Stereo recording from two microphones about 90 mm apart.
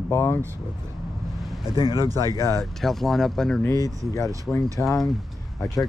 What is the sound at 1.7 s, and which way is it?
Speech, 45° right (ahead or behind).